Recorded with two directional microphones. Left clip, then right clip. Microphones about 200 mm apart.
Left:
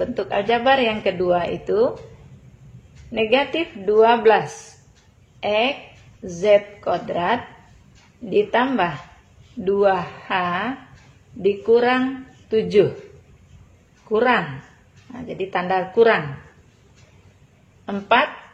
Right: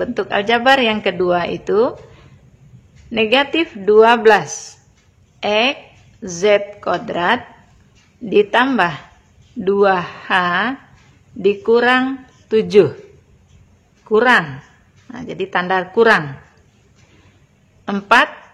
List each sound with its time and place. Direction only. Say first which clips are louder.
0.0 s a woman's voice: right 3 dB; 25° right (ahead or behind)
3.1 s a woman's voice: right 4 dB; 25° right (ahead or behind)
14.0 s a woman's voice: right 6 dB; 25° right (ahead or behind)
17.8 s a woman's voice: right 5 dB; 30° right (ahead or behind)